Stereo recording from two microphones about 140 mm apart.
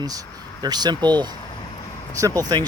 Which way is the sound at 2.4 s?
30° right (ahead or behind).